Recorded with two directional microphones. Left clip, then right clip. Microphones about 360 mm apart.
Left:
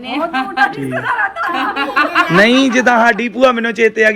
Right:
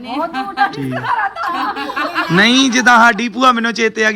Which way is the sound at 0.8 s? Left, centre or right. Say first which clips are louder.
Left 1 dB; right.